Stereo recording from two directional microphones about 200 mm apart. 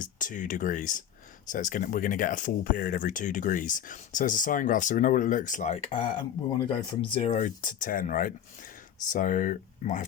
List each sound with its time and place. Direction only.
0.0 s speech: 40° left (ahead or behind)